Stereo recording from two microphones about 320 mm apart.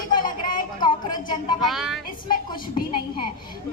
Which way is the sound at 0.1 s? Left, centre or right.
Centre.